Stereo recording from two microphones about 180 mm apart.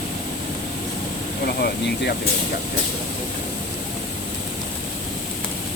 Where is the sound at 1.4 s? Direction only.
60° left (ahead or behind).